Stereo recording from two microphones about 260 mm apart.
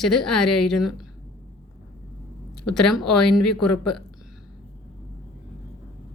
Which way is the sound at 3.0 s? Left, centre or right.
Left.